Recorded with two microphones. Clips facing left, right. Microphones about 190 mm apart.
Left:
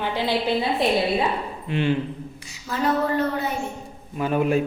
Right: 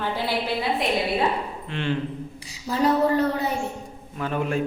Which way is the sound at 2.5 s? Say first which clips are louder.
Right 2 dB; 35° right (ahead or behind).